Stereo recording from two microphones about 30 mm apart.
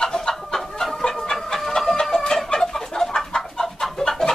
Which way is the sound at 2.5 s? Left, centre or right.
Centre.